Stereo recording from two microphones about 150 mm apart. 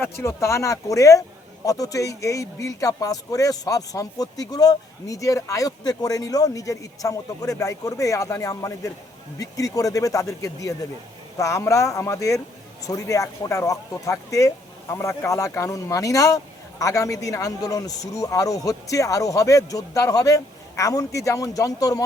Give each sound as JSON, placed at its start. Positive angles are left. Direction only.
{"t": 0.0, "sound": "speech", "side_deg": 20}